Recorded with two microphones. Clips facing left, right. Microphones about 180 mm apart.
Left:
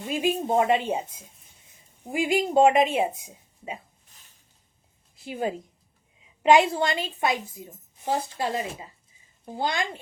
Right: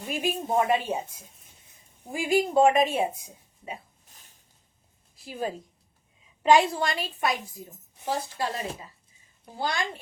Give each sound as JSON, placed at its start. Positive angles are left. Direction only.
{"t": 0.1, "sound": "a woman's voice", "side_deg": 20}
{"t": 5.1, "sound": "a woman's voice", "side_deg": 20}